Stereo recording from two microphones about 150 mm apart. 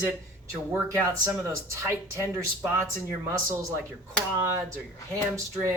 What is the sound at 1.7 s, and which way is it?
Speech, 15° right (ahead or behind).